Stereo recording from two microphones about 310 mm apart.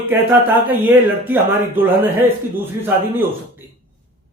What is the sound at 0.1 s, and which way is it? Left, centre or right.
Speech, centre.